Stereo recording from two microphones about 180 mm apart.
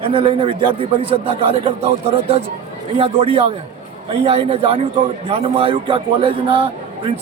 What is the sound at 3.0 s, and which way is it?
A man's voice, 30° right (ahead or behind).